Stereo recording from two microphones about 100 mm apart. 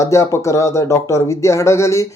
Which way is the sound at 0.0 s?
30° left (ahead or behind).